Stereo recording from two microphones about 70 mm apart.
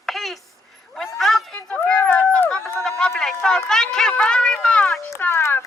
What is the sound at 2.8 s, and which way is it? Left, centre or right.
Speech, centre.